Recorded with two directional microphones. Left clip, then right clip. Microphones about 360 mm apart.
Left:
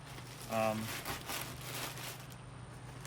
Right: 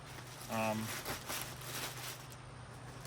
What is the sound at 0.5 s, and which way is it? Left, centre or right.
Speech, centre.